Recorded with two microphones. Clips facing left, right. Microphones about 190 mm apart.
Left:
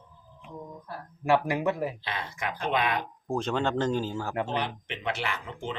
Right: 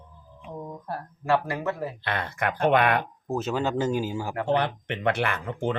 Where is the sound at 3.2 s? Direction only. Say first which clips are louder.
Left 1 dB; 5° right (ahead or behind).